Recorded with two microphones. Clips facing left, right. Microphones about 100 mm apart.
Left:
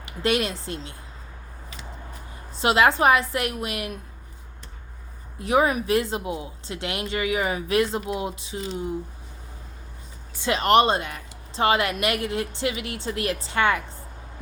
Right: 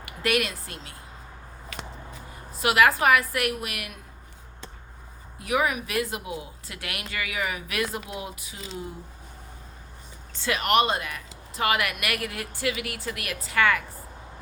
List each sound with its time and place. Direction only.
0.0 s speech: 25° left (ahead or behind)
2.5 s speech: 25° left (ahead or behind)
5.4 s speech: 30° left (ahead or behind)
10.3 s speech: 25° left (ahead or behind)